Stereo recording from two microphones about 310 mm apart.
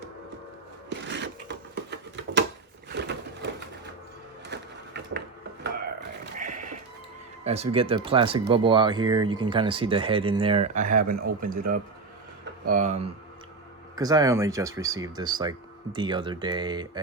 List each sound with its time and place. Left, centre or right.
1.0 s a sound: right
2.9 s crushing: right
4.4 s printer: right
6.0 s a sound: right
7.4 s speech: centre
13.9 s speech: centre